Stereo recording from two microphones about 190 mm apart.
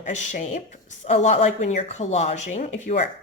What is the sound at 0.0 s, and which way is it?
Speech, 40° left (ahead or behind).